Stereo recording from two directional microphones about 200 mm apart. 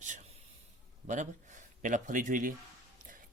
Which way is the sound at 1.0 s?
40° right (ahead or behind).